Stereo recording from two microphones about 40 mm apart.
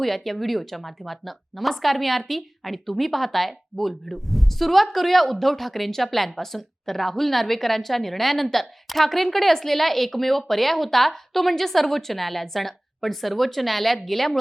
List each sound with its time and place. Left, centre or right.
0.0 s a woman's voice: centre